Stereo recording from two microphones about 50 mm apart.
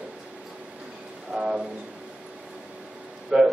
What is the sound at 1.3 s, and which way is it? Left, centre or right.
Speech, centre.